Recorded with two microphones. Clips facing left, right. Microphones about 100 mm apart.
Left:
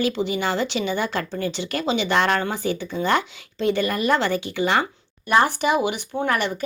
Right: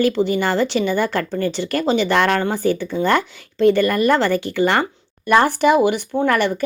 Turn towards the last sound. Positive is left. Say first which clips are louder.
# right 5 dB
turn(degrees=-50)  # may be behind; listen again after turning